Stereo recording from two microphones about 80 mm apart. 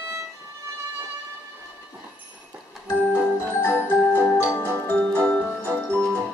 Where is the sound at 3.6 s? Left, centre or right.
Left; by 5.9 s centre.